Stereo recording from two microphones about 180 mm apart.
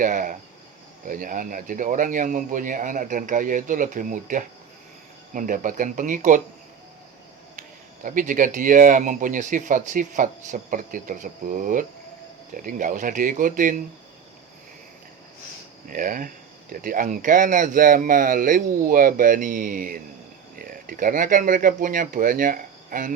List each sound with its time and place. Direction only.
0.0 s speech: 50° right (ahead or behind)
8.0 s speech: 50° right (ahead or behind)
15.9 s speech: 50° right (ahead or behind)